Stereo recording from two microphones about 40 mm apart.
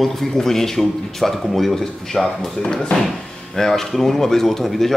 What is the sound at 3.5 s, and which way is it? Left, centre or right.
Speech, centre.